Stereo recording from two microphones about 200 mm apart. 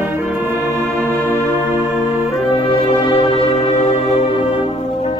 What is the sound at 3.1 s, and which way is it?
Music, 35° left (ahead or behind).